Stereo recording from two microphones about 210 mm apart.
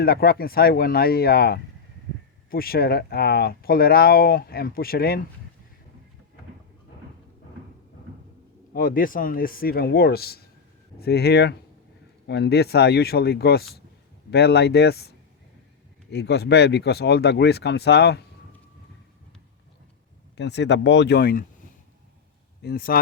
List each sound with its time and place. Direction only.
0.0 s speech: 45° left (ahead or behind)
8.7 s speech: 40° left (ahead or behind)
16.1 s speech: 50° left (ahead or behind)
20.3 s speech: 55° left (ahead or behind)
22.6 s speech: 45° left (ahead or behind)